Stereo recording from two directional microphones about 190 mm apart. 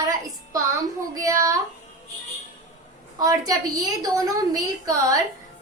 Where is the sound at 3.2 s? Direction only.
20° right (ahead or behind).